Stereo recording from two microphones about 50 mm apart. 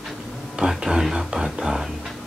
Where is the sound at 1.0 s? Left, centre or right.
Centre.